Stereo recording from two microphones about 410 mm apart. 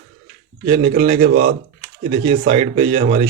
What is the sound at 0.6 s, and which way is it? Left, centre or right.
Speech, centre.